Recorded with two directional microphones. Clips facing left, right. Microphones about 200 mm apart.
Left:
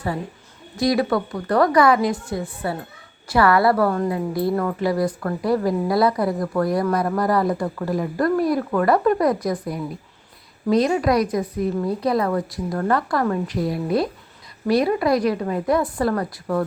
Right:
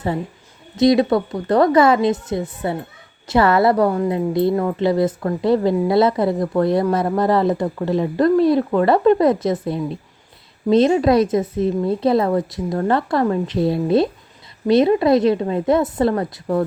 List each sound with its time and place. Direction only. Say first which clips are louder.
0.8 s a woman's voice: right 5 dB; 25° right (ahead or behind)